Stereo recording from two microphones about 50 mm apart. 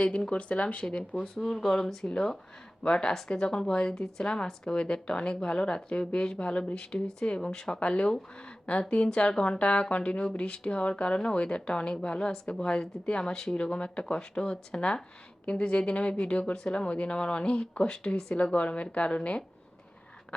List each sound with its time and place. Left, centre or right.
0.3 s speech: left
1.4 s speech: centre